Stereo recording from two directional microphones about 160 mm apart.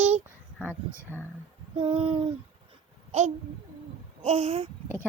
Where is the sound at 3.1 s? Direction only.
45° right (ahead or behind).